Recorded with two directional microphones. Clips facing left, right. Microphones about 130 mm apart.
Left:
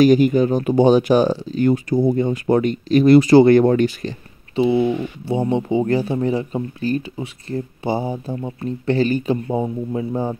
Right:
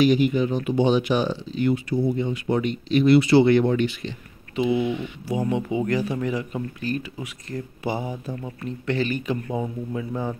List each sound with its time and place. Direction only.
0.0 s speech: 45° left (ahead or behind)
4.6 s speech: 35° left (ahead or behind)